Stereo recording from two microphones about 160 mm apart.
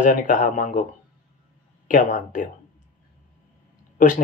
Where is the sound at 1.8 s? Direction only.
55° left (ahead or behind).